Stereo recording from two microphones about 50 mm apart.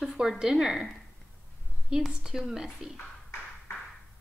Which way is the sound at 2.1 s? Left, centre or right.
Centre.